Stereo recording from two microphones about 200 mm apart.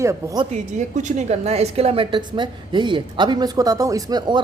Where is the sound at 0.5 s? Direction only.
40° right (ahead or behind).